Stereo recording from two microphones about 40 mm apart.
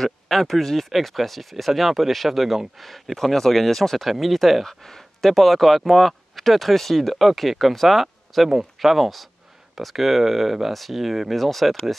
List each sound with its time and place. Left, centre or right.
0.0 s speech: centre
4.6 s speech: centre